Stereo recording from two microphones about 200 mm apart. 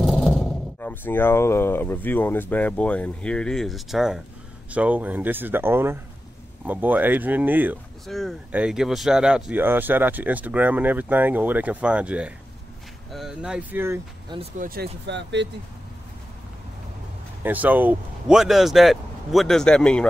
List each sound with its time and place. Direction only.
0.0 s speech: centre (ahead or behind)
14.6 s speech: 50° right (ahead or behind)
17.4 s speech: 10° right (ahead or behind)